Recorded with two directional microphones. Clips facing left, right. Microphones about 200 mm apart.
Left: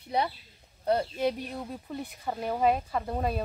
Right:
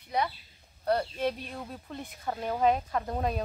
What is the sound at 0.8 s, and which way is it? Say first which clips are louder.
Speech: left 2 dB; 20° left (ahead or behind).